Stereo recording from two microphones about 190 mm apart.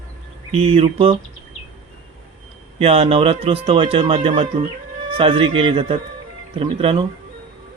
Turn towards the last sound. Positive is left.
turn(degrees=-30)  # may be behind; listen again after turning